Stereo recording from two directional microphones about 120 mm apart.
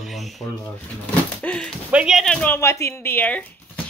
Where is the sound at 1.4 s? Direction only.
10° left (ahead or behind).